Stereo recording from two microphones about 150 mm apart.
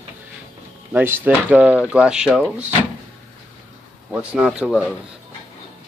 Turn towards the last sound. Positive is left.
turn(degrees=-5)  # may be behind; listen again after turning